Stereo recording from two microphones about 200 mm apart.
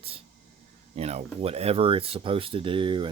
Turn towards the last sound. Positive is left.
turn(degrees=-25)  # may be behind; listen again after turning